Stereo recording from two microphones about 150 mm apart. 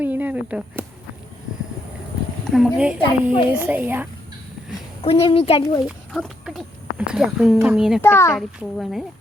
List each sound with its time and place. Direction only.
0.0 s chop: 10° right (ahead or behind)
2.5 s speech: centre (ahead or behind)
5.0 s a child's voice: 40° left (ahead or behind)
5.8 s speech: centre (ahead or behind)
8.0 s speech: 15° left (ahead or behind)
8.4 s speech: centre (ahead or behind)